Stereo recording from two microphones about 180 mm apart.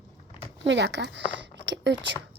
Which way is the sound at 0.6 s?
80° right.